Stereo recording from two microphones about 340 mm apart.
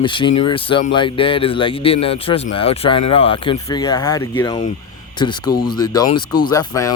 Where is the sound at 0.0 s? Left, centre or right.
Centre.